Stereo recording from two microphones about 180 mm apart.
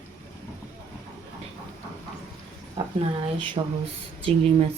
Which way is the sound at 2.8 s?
30° right (ahead or behind).